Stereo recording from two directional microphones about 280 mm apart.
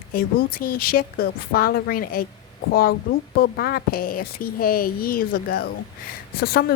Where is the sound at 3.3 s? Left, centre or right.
Left.